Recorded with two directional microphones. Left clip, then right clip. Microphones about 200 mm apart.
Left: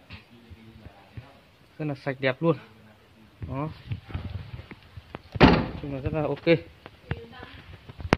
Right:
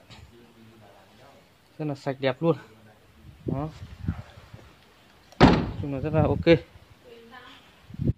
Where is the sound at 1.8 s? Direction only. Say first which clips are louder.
Even; 15° right (ahead or behind).